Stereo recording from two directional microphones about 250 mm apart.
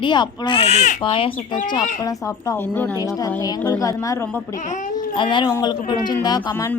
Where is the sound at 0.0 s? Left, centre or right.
Centre.